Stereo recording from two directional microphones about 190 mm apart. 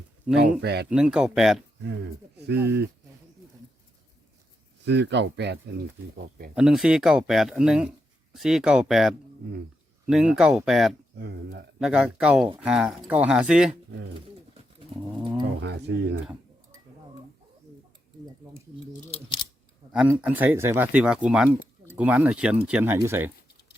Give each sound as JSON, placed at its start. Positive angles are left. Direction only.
{"t": 0.3, "sound": "speech", "side_deg": -5}
{"t": 0.6, "sound": "speech", "side_deg": -60}
{"t": 0.9, "sound": "speech", "side_deg": -5}
{"t": 1.8, "sound": "speech", "side_deg": -70}
{"t": 4.9, "sound": "speech", "side_deg": -65}
{"t": 6.5, "sound": "speech", "side_deg": -5}
{"t": 11.2, "sound": "speech", "side_deg": -65}
{"t": 11.8, "sound": "speech", "side_deg": -5}
{"t": 14.1, "sound": "bird", "side_deg": -25}
{"t": 15.6, "sound": "speech", "side_deg": -65}
{"t": 19.9, "sound": "speech", "side_deg": -5}